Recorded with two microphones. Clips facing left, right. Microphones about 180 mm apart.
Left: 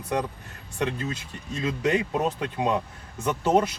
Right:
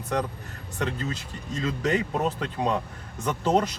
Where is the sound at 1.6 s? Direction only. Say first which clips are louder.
Left 1 dB; 15° left (ahead or behind).